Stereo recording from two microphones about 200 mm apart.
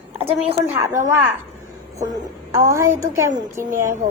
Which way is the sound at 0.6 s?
15° right (ahead or behind).